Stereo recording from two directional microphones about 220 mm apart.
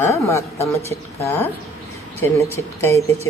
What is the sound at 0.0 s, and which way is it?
A woman's voice, 15° left (ahead or behind).